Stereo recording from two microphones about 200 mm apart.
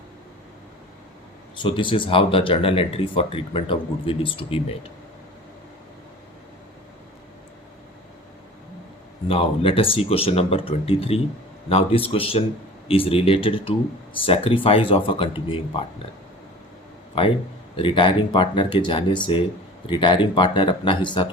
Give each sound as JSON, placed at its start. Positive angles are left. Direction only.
{"t": 1.5, "sound": "speech", "side_deg": 25}
{"t": 9.2, "sound": "speech", "side_deg": 30}
{"t": 17.2, "sound": "speech", "side_deg": 25}